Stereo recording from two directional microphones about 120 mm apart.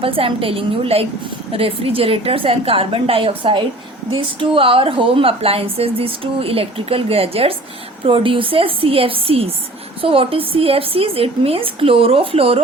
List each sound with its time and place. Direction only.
0.0 s a woman's voice: 50° right (ahead or behind)